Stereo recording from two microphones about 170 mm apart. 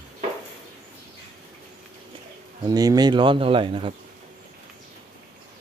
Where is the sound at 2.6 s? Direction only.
20° right (ahead or behind).